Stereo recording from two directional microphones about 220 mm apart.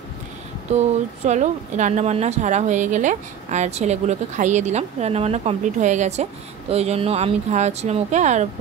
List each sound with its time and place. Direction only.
0.7 s speech: 30° right (ahead or behind)